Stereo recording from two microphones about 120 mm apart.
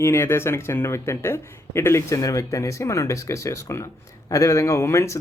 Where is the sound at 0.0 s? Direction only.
20° left (ahead or behind).